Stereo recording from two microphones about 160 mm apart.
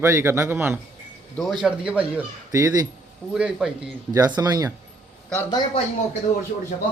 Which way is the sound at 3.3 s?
5° right (ahead or behind).